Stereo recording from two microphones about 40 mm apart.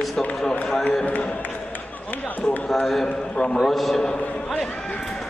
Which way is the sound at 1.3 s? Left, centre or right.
Left.